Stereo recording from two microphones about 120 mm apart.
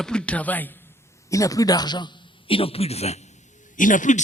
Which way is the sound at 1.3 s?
30° left (ahead or behind).